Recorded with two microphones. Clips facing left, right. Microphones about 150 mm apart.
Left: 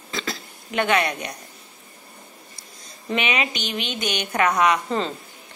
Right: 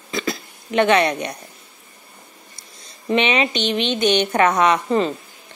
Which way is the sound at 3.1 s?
25° right (ahead or behind).